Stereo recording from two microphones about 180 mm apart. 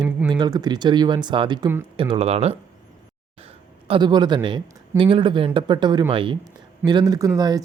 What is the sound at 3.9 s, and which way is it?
Speech, 25° right (ahead or behind).